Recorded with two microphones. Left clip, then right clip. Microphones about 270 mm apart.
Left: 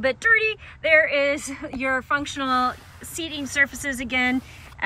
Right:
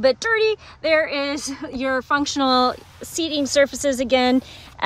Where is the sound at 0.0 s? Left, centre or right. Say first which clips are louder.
Right 2 dB; centre.